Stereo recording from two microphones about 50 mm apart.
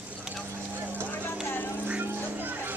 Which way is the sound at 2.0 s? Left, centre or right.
Right.